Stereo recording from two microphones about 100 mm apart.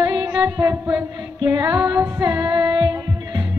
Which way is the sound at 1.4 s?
45° right (ahead or behind).